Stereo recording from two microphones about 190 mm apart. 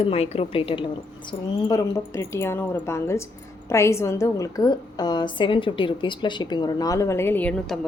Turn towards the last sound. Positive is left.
turn(degrees=10)  # may be behind; listen again after turning